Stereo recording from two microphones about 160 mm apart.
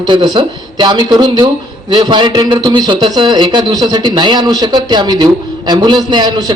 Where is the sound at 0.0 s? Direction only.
30° right (ahead or behind).